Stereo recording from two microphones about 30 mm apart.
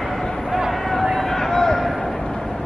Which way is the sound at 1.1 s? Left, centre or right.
Centre.